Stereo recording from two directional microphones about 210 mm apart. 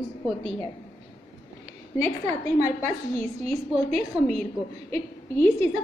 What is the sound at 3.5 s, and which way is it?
Speech, 30° right (ahead or behind).